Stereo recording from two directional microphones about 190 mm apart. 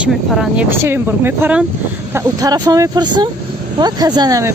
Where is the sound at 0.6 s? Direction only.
10° right (ahead or behind).